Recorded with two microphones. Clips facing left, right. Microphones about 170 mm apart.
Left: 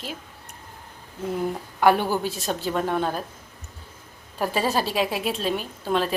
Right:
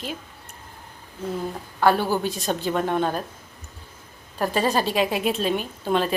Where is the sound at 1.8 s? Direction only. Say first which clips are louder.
Even; 15° left (ahead or behind).